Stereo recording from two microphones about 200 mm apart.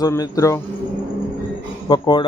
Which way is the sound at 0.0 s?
15° left (ahead or behind).